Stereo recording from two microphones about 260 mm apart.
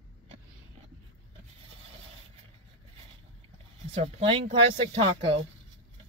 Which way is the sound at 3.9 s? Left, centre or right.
Right.